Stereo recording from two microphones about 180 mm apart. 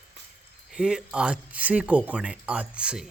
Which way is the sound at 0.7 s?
5° right (ahead or behind).